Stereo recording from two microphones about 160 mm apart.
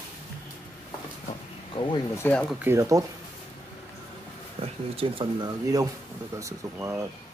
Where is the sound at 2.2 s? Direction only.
10° left (ahead or behind).